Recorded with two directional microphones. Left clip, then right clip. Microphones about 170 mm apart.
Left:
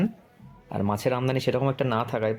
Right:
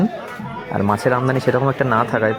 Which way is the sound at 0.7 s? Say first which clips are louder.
Right 9 dB; 25° right (ahead or behind).